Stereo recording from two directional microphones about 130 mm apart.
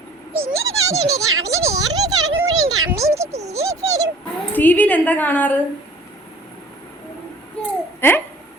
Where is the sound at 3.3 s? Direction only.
55° right (ahead or behind).